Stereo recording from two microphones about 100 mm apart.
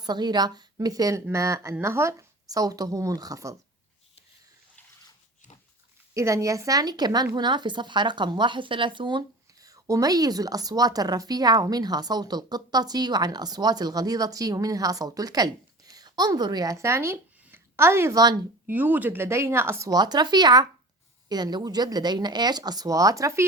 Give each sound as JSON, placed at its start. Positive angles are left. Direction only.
{"t": 0.0, "sound": "speech", "side_deg": -45}
{"t": 6.1, "sound": "speech", "side_deg": -30}
{"t": 19.9, "sound": "speech", "side_deg": -45}